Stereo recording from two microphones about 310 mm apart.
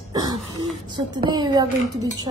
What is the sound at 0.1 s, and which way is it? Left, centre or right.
Throat clearing, centre.